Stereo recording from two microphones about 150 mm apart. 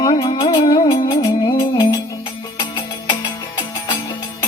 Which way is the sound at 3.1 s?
30° left (ahead or behind).